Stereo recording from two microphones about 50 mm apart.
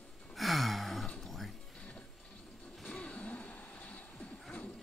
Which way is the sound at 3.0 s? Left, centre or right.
Left.